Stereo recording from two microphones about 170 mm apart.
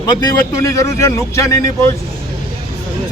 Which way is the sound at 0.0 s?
20° left (ahead or behind).